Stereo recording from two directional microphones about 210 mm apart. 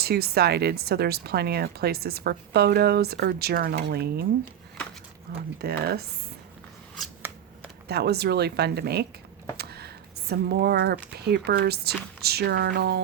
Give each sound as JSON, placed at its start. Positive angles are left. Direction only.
{"t": 0.0, "sound": "speech", "side_deg": -50}
{"t": 5.5, "sound": "speech", "side_deg": -50}
{"t": 7.0, "sound": "shuffling cards", "side_deg": -5}
{"t": 7.9, "sound": "speech", "side_deg": -50}